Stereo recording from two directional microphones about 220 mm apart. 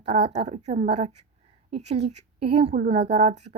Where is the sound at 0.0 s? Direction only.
30° right (ahead or behind).